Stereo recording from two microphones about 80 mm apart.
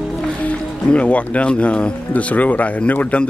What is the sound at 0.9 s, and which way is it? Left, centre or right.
Speech, centre.